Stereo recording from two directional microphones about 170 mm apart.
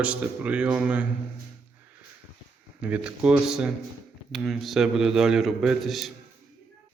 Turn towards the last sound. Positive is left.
turn(degrees=0)  # may be behind; listen again after turning